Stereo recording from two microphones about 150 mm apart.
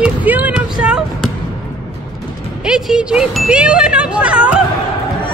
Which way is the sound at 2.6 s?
5° right (ahead or behind).